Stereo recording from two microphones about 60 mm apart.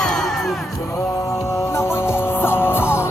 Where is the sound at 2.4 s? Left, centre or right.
Left.